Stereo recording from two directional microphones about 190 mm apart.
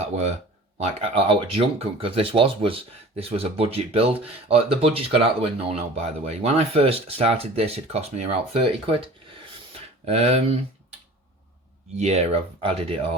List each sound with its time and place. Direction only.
0.8 s speech: 35° right (ahead or behind)
10.1 s speech: 35° right (ahead or behind)
11.9 s speech: 35° right (ahead or behind)